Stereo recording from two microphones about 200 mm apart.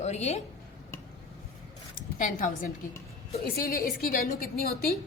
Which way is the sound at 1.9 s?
40° left (ahead or behind).